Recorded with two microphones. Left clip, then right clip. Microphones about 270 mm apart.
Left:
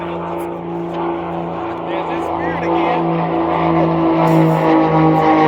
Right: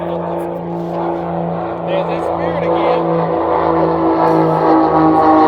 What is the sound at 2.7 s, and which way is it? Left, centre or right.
Music, left.